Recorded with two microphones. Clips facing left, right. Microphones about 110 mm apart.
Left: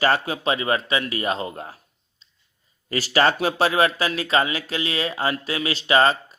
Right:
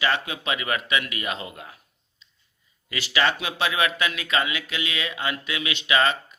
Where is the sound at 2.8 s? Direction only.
40° left (ahead or behind).